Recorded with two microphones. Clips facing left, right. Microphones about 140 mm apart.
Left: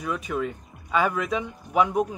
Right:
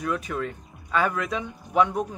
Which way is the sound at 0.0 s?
Centre (ahead or behind).